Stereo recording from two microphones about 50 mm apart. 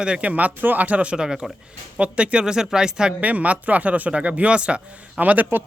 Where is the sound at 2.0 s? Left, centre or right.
Right.